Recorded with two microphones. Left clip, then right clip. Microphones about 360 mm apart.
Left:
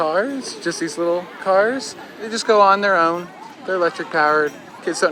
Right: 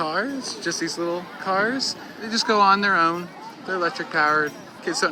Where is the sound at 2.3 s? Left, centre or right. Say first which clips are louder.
Left 4 dB; centre.